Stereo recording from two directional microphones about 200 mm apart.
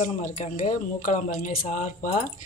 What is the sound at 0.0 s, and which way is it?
Speech, 40° left (ahead or behind).